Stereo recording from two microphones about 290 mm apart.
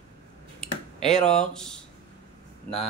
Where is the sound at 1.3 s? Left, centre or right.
Centre.